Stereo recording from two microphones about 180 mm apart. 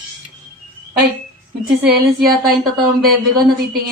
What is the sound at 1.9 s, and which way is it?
Speech, 60° right (ahead or behind).